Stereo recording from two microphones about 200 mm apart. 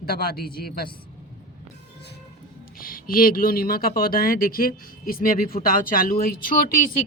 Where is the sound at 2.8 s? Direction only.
45° left (ahead or behind).